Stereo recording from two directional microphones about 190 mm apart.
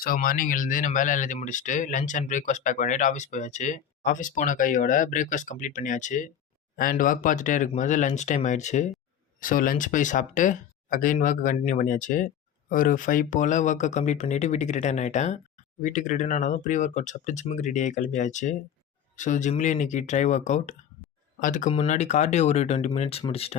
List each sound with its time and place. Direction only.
0.0 s speech: 50° left (ahead or behind); by 23.6 s 30° left (ahead or behind)